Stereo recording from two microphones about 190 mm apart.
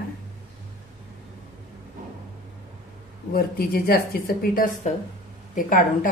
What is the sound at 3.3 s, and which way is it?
A woman's voice, 50° left (ahead or behind).